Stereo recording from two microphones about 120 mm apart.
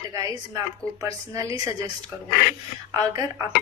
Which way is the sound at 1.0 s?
30° right (ahead or behind).